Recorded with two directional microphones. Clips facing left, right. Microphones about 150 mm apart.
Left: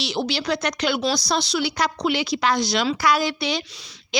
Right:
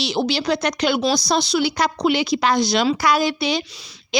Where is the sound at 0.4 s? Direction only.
30° right (ahead or behind).